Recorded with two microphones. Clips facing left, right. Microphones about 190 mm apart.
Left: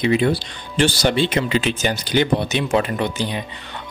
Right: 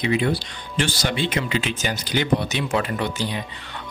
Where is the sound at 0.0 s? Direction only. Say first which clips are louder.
Left 4 dB; 30° left (ahead or behind).